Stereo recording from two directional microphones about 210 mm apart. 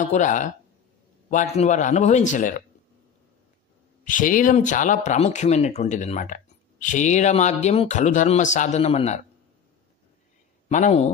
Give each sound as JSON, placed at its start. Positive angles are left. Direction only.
{"t": 0.0, "sound": "speech", "side_deg": 35}
{"t": 4.0, "sound": "speech", "side_deg": 40}
{"t": 10.7, "sound": "speech", "side_deg": 35}